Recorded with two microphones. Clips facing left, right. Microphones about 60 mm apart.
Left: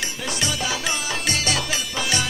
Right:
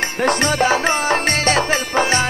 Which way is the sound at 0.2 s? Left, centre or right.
Right.